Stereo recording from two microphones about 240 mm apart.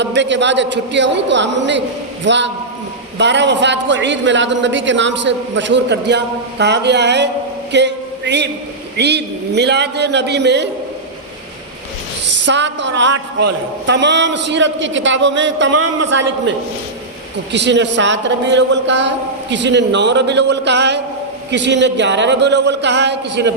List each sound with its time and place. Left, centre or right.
0.0 s a man's voice: right
7.7 s a sound: right
9.0 s a man's voice: right
12.2 s a woman's voice: right
17.5 s a man's voice: right